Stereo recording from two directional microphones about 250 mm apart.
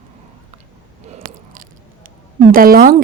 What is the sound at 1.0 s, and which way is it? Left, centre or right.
Biting, right.